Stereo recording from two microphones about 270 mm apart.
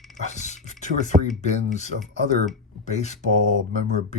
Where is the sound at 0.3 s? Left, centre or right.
Left.